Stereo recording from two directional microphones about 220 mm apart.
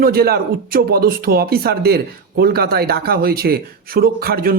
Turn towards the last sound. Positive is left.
turn(degrees=-40)  # may be behind; listen again after turning